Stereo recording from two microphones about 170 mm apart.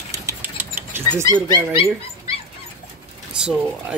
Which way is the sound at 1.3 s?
20° right (ahead or behind).